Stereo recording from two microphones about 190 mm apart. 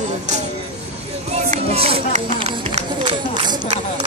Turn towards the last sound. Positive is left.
turn(degrees=-25)  # may be behind; listen again after turning